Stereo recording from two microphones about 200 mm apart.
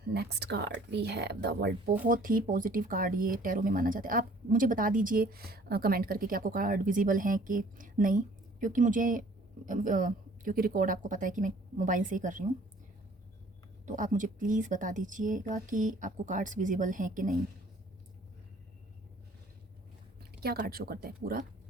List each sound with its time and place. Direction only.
0.1 s speech: 55° right (ahead or behind)
13.8 s speech: 40° right (ahead or behind)
20.4 s speech: 50° right (ahead or behind)